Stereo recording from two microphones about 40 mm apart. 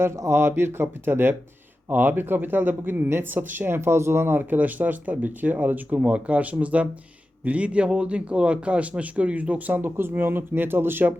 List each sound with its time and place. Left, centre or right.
0.0 s speech: right
1.9 s speech: right
3.7 s speech: right
4.4 s a man's voice: right
9.7 s speech: right